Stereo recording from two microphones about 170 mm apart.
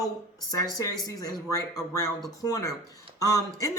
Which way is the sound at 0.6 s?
20° left (ahead or behind).